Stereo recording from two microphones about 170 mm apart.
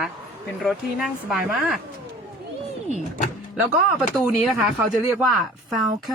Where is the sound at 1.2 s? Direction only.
Centre (ahead or behind).